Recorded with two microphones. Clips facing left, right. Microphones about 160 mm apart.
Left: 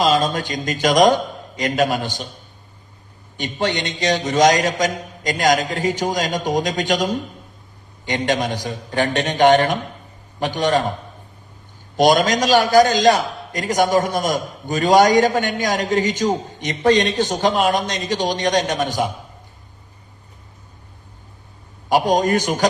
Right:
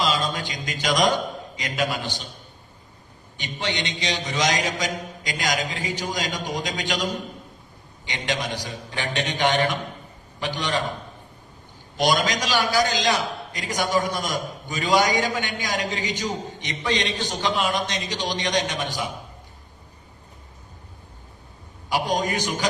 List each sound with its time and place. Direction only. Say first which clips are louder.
0.0 s a man's voice: left 7 dB; 45° left (ahead or behind)
3.3 s a man's voice: left 7 dB; 45° left (ahead or behind)
11.9 s a man's voice: left 7 dB; 45° left (ahead or behind)
21.8 s a man's voice: left 8 dB; 45° left (ahead or behind)